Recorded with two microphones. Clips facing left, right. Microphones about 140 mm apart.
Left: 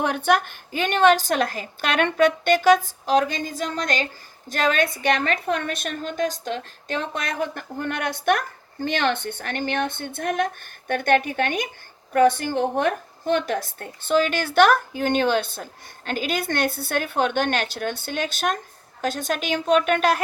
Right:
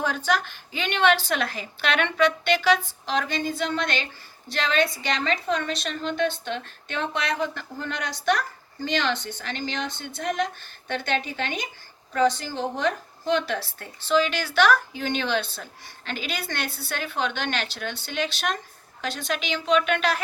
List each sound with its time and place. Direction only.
0.0 s a woman's voice: 60° left (ahead or behind)